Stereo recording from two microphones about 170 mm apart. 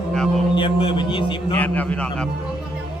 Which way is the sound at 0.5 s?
30° left (ahead or behind).